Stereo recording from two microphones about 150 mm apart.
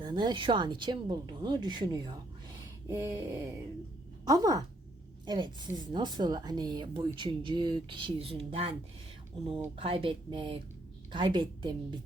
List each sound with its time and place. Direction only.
0.0 s speech: 30° right (ahead or behind)
9.7 s speech: 35° right (ahead or behind)